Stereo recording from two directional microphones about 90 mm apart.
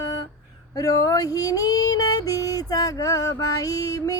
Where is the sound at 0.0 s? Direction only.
45° left (ahead or behind).